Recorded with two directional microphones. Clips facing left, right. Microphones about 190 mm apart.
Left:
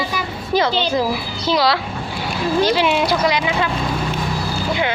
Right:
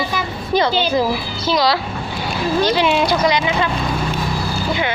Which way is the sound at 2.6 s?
10° left (ahead or behind).